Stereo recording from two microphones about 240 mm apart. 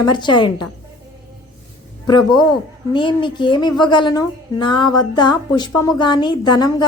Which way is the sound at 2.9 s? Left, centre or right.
Centre.